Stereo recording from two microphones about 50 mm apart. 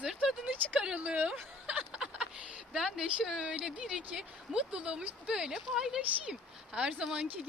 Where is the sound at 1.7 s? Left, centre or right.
Right.